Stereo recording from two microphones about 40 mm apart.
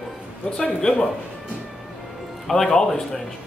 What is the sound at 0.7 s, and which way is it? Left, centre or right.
Speech, centre.